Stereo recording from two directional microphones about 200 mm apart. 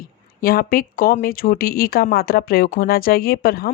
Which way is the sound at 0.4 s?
45° left (ahead or behind).